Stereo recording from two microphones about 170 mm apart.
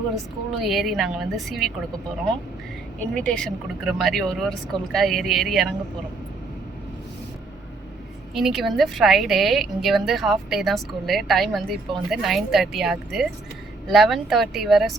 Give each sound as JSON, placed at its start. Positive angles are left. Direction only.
{"t": 0.6, "sound": "speech", "side_deg": 0}
{"t": 3.2, "sound": "speech", "side_deg": 5}
{"t": 8.4, "sound": "speech", "side_deg": 0}